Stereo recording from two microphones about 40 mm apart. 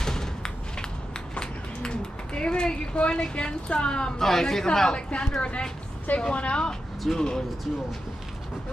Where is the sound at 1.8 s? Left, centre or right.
Left.